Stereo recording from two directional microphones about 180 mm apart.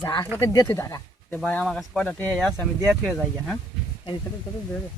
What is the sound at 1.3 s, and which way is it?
Speech, 5° left (ahead or behind).